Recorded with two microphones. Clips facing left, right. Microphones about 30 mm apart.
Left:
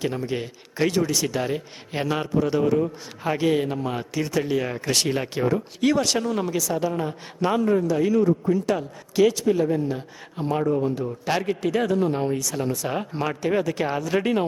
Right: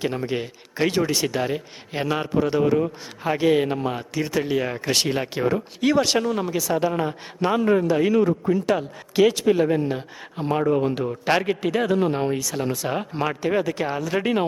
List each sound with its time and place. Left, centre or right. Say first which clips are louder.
0.3 s speech: right 1 dB; centre
0.9 s a man's voice: right 1 dB; right
1.4 s a man's voice: right 1 dB; centre
2.2 s speech: right 2 dB; centre
3.6 s a man's voice: right 3 dB; right
4.2 s speech: right 1 dB; centre
6.3 s speech: even; centre
6.6 s a man's voice: right 2 dB; right
8.4 s a man's voice: right 1 dB; centre
9.5 s a man's voice: right 2 dB; right
10.3 s a man's voice: right 1 dB; right
10.7 s speech: right 3 dB; right
11.0 s a man's voice: right 3 dB; right
12.9 s speech: right 1 dB; centre